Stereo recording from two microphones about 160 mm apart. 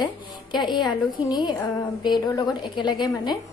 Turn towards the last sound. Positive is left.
turn(degrees=30)  # may be behind; listen again after turning